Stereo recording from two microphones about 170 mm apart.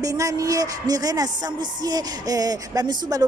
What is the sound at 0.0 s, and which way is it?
Speech, 20° right (ahead or behind).